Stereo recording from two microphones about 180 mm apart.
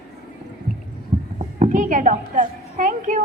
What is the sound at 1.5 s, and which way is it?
A woman's voice, 45° right (ahead or behind).